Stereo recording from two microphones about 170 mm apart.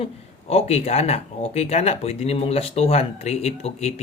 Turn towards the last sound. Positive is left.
turn(degrees=40)  # may be behind; listen again after turning